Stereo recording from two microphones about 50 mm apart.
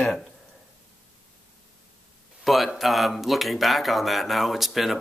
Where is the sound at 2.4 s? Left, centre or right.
Centre.